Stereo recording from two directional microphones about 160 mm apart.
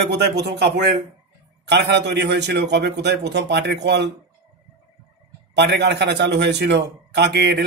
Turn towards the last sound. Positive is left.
turn(degrees=-90)